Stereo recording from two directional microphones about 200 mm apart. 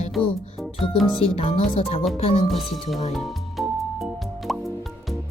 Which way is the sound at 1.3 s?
30° left (ahead or behind).